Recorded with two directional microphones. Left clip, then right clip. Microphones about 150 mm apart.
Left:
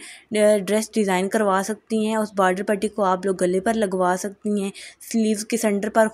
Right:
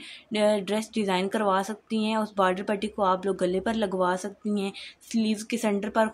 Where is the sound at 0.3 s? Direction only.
30° left (ahead or behind).